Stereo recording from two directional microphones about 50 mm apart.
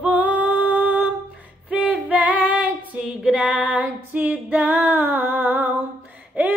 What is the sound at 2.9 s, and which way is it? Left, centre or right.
Female singing, centre.